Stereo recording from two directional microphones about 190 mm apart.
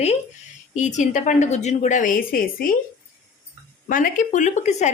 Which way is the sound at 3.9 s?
45° left (ahead or behind).